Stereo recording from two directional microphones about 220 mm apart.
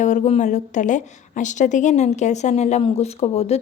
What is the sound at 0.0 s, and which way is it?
A woman's voice, 35° left (ahead or behind).